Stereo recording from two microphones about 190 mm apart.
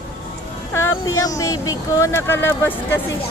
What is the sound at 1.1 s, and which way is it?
Speech, 15° left (ahead or behind).